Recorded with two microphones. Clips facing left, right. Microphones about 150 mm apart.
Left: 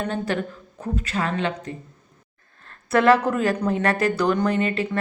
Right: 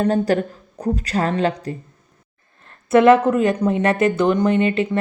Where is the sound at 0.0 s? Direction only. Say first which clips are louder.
Right 8 dB; 40° right (ahead or behind).